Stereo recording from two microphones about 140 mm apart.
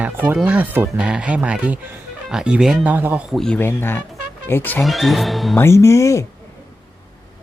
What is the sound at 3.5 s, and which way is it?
Speech, 15° left (ahead or behind).